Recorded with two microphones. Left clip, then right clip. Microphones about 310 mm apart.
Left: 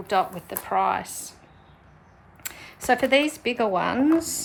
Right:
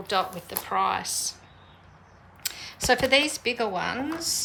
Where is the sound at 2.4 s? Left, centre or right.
Centre.